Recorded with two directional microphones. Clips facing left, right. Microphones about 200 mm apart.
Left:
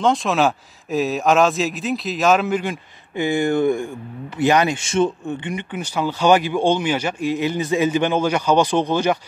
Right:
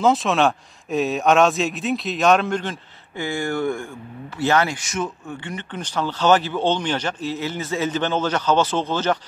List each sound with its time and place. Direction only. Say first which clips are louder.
0.0 s speech: even; centre (ahead or behind); by 4.7 s 15° left (ahead or behind)
4.8 s speech: left 8 dB; 30° left (ahead or behind)
5.4 s speech: left 4 dB; 15° left (ahead or behind)